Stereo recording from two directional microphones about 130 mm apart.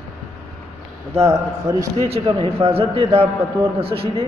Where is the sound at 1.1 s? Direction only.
20° right (ahead or behind).